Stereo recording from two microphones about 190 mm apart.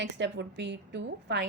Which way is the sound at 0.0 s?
65° right (ahead or behind).